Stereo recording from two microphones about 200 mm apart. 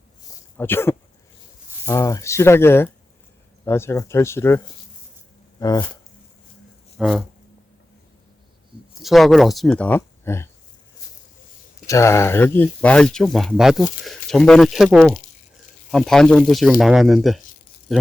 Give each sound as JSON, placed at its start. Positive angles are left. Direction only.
{"t": 0.5, "sound": "speech", "side_deg": 10}
{"t": 7.0, "sound": "speech", "side_deg": 0}
{"t": 9.0, "sound": "speech", "side_deg": 0}
{"t": 11.9, "sound": "speech", "side_deg": 15}